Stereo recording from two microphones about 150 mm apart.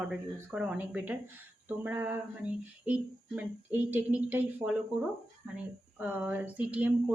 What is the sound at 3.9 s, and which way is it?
Speech, 10° right (ahead or behind).